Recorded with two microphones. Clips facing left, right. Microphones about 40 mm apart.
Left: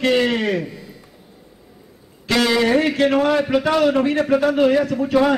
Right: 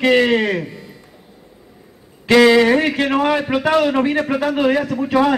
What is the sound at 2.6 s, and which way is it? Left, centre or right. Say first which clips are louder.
A man's voice: right 1 dB; centre.